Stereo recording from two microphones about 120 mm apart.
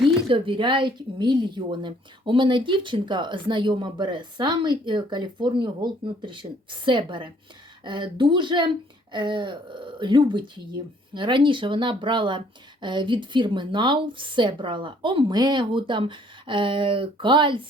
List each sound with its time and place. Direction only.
0.3 s a woman's voice: 45° right (ahead or behind)